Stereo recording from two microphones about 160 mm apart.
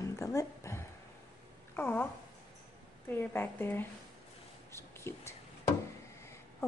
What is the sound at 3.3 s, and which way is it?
Speech, 10° left (ahead or behind).